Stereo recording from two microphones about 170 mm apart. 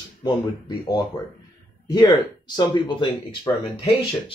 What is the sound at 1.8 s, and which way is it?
Speech, 25° left (ahead or behind).